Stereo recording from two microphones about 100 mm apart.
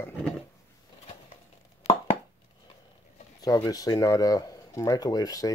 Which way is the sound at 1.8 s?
90° left.